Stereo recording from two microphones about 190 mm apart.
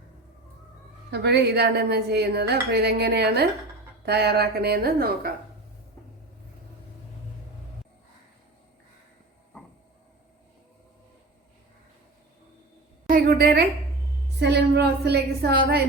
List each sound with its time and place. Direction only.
1.1 s speech: 60° right (ahead or behind)
13.1 s a woman's voice: 50° right (ahead or behind)